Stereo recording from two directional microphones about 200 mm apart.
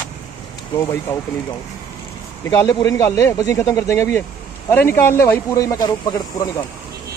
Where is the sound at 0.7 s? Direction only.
15° left (ahead or behind).